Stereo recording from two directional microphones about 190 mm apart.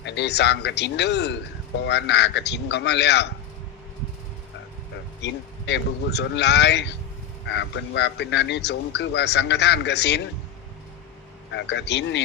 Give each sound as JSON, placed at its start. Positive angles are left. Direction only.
{"t": 0.0, "sound": "a man's voice", "side_deg": 65}
{"t": 5.2, "sound": "a man's voice", "side_deg": 65}
{"t": 11.5, "sound": "a man's voice", "side_deg": 65}